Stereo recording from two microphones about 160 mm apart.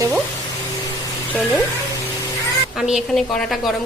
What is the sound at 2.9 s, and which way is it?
Speech, centre (ahead or behind).